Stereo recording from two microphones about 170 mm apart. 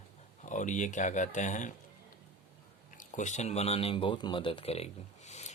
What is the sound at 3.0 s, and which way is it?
Speech, 45° left (ahead or behind).